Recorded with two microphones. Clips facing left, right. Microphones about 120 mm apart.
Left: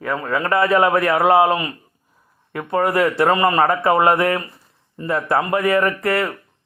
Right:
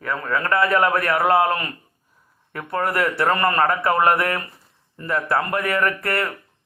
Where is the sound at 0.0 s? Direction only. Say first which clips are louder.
Left 3 dB; 20° left (ahead or behind).